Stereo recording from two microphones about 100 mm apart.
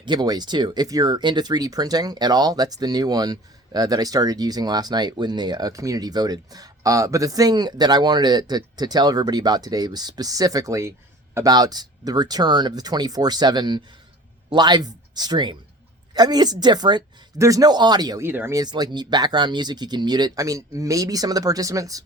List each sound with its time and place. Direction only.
0.0 s speech: 45° right (ahead or behind)
11.4 s speech: 40° right (ahead or behind)
17.3 s speech: 30° right (ahead or behind)
18.2 s speech: 20° right (ahead or behind)
18.5 s speech: 45° right (ahead or behind)